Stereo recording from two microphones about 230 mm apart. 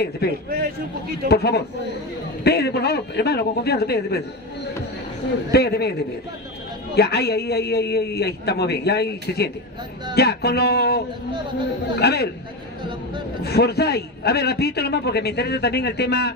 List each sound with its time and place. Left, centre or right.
0.2 s a man's voice: left
5.5 s a man's voice: left
7.0 s a man's voice: left
13.4 s a man's voice: left